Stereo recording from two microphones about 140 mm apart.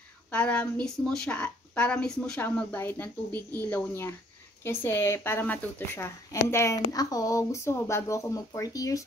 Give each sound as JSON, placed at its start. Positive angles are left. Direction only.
{"t": 0.3, "sound": "a woman's voice", "side_deg": 10}
{"t": 3.3, "sound": "speech", "side_deg": -25}
{"t": 3.6, "sound": "a woman's voice", "side_deg": 15}